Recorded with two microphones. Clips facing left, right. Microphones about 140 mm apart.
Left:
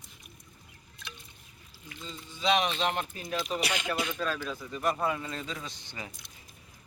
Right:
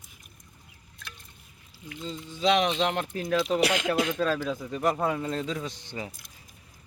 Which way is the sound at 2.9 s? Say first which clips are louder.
Right 6 dB; 90° right.